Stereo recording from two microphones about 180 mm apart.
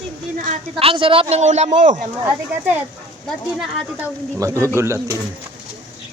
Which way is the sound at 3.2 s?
Centre (ahead or behind).